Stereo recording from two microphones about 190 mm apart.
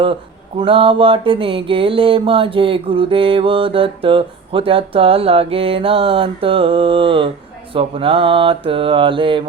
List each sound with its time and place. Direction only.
0.6 s mantra: 30° right (ahead or behind)